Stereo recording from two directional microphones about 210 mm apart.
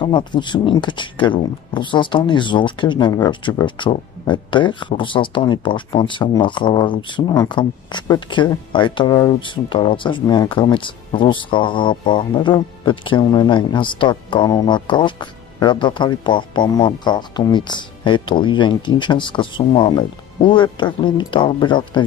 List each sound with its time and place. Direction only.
0.0 s speech: 20° left (ahead or behind)